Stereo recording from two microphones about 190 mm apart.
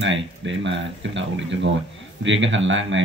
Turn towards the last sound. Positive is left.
turn(degrees=-80)